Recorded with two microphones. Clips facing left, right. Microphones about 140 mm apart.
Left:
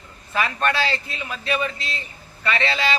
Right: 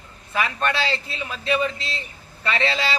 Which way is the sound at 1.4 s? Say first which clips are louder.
Right 2 dB; 25° right (ahead or behind).